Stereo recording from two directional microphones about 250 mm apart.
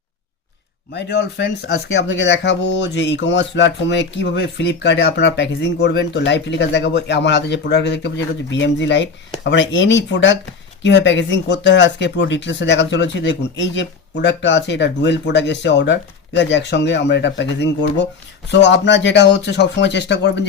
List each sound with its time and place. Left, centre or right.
0.9 s speech: left